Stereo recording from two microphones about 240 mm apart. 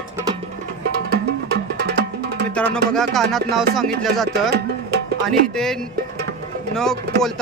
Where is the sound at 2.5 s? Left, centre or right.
Centre.